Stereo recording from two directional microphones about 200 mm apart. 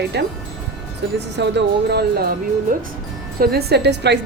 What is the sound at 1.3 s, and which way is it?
Speech, 60° right (ahead or behind).